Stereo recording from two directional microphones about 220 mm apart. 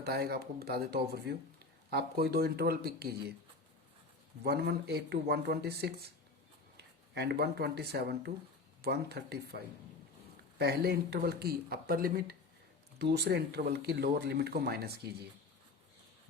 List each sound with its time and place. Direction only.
0.0 s speech: 45° right (ahead or behind)
4.4 s speech: 45° right (ahead or behind)